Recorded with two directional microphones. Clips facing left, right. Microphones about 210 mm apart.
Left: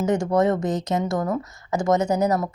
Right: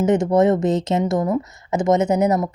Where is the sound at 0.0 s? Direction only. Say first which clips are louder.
Right 4 dB; 20° right (ahead or behind).